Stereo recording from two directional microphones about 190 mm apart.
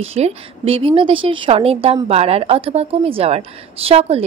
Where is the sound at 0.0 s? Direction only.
30° right (ahead or behind).